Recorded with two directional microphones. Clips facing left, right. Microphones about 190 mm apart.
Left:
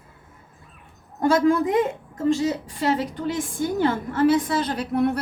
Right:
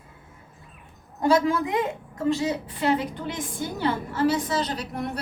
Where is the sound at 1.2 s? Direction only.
50° left (ahead or behind).